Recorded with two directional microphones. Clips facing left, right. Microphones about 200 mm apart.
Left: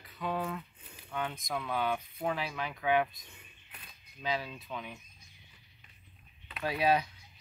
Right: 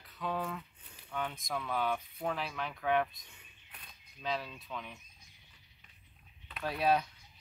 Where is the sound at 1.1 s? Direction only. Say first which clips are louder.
Left 2 dB; centre (ahead or behind).